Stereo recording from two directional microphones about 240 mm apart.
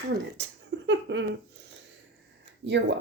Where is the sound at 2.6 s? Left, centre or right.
Right.